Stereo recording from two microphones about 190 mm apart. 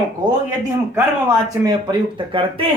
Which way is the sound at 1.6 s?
25° right (ahead or behind).